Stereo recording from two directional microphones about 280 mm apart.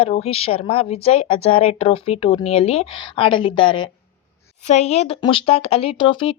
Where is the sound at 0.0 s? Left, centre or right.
Left.